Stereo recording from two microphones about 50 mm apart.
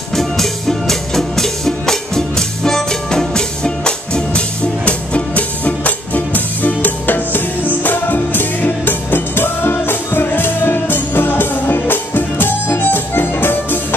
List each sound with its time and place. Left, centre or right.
0.1 s music: centre; by 13.7 s left